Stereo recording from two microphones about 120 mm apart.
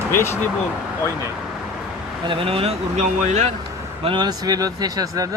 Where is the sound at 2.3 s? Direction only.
50° right (ahead or behind); by 3.5 s 75° right (ahead or behind).